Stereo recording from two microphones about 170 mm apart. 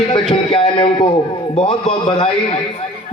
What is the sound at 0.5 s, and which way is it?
A man's voice, 30° left (ahead or behind).